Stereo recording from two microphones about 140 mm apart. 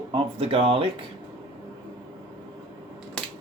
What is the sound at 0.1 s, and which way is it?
Speech, 40° right (ahead or behind).